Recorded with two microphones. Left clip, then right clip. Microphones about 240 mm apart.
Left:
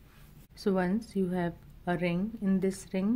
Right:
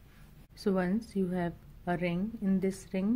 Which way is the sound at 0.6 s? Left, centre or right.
Centre.